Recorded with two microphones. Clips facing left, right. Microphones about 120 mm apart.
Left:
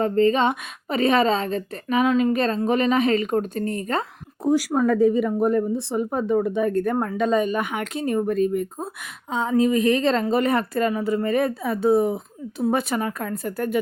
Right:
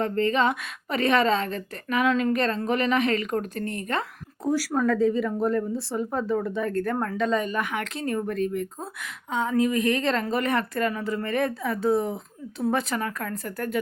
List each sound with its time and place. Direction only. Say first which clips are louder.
0.0 s speech: left 4 dB; 25° left (ahead or behind)